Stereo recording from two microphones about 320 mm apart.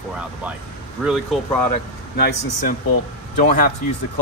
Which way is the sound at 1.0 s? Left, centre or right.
Centre.